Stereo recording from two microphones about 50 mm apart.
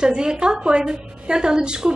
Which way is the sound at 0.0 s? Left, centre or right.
Centre.